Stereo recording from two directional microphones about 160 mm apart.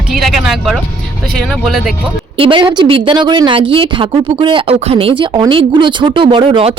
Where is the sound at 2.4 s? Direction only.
30° right (ahead or behind).